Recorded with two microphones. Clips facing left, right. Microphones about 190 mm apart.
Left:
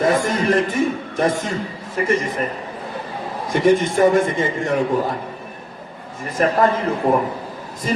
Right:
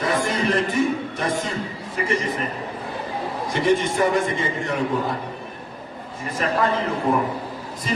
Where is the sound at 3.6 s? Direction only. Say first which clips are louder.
Left 5 dB; 45° left (ahead or behind).